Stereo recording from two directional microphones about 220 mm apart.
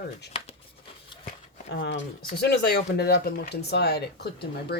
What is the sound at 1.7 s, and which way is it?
Speech, 50° left (ahead or behind).